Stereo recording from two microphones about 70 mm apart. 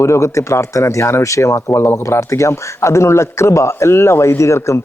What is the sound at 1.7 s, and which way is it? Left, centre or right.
Speech, left.